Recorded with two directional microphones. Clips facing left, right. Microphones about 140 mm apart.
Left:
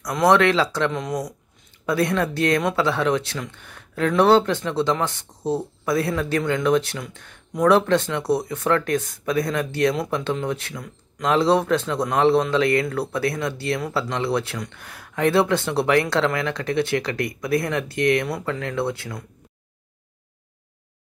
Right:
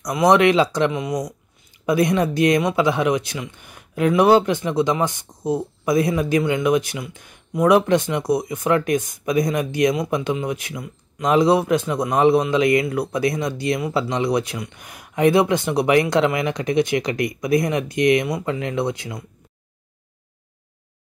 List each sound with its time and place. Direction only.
0.0 s speech: 15° right (ahead or behind)